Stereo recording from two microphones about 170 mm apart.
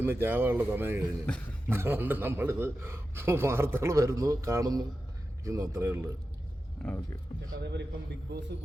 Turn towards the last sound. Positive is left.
turn(degrees=5)  # may be behind; listen again after turning